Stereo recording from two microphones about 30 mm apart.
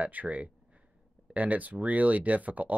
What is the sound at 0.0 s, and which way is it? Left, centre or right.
Speech, right.